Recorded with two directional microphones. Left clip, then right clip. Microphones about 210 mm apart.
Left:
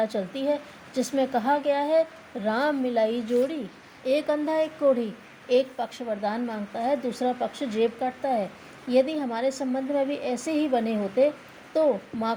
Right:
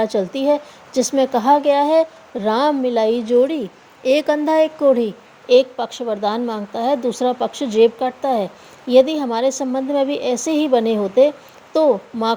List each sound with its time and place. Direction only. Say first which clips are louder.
0.0 s a woman's voice: right 8 dB; 35° right (ahead or behind)